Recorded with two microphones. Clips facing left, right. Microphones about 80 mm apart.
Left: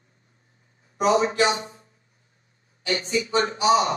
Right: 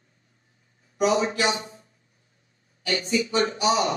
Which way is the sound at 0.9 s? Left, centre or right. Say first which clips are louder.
Left 2 dB; left.